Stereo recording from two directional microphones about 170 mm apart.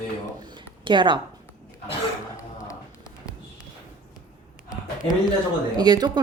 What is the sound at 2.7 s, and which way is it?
Run, 20° left (ahead or behind).